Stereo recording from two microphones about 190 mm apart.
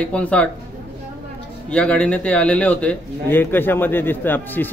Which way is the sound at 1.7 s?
5° left (ahead or behind).